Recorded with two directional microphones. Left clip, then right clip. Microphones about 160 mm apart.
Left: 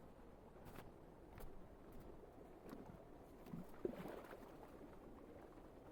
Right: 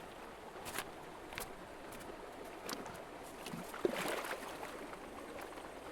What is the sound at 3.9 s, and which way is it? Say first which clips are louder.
Boat: right 14 dB; 20° right (ahead or behind).